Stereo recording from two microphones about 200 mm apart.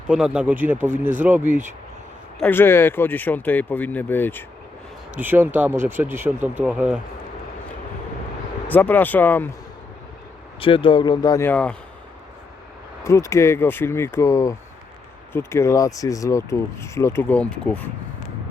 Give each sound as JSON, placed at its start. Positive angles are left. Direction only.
{"t": 0.1, "sound": "speech", "side_deg": -5}
{"t": 2.4, "sound": "speech", "side_deg": 10}
{"t": 5.1, "sound": "speech", "side_deg": -10}
{"t": 8.6, "sound": "speech", "side_deg": 10}
{"t": 10.6, "sound": "speech", "side_deg": 25}
{"t": 13.1, "sound": "speech", "side_deg": 15}